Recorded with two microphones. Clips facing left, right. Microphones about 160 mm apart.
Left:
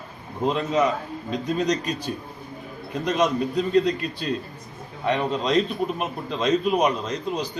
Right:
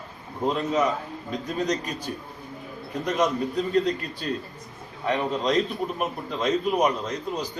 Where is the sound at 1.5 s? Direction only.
90° left.